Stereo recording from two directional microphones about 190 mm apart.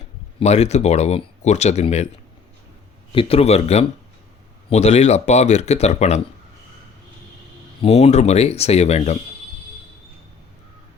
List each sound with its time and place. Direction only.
0.3 s speech: 35° left (ahead or behind)
3.1 s speech: 30° left (ahead or behind)
7.8 s speech: 35° left (ahead or behind)